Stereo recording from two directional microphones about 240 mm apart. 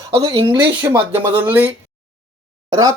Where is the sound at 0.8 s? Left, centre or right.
Centre.